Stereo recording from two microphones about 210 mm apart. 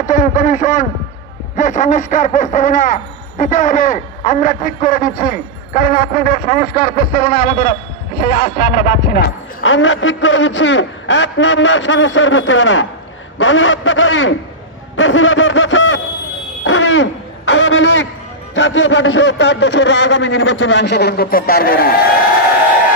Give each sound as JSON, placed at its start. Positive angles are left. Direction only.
{"t": 0.1, "sound": "speech", "side_deg": 35}
{"t": 9.6, "sound": "a man's voice", "side_deg": 65}
{"t": 16.6, "sound": "a sound", "side_deg": 60}
{"t": 18.5, "sound": "a man's voice", "side_deg": 60}